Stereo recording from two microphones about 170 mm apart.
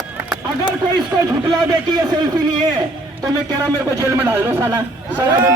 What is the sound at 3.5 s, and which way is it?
A man's voice, 15° right (ahead or behind).